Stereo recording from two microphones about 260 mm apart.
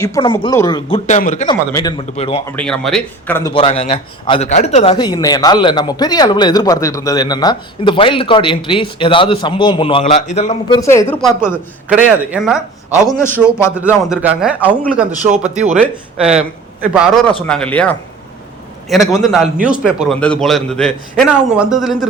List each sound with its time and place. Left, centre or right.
0.0 s a man's voice: centre
1.5 s a man's voice: centre
2.5 s a man's voice: centre
3.5 s a man's voice: left
10.8 s speech: centre
11.4 s a man's voice: centre
13.1 s speech: centre
13.7 s a man's voice: centre
15.3 s speech: right
16.8 s a man's voice: centre